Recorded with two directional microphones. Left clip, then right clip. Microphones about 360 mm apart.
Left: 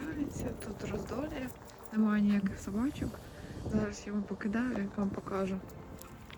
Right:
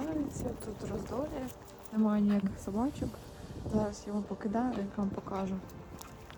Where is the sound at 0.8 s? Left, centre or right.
Right.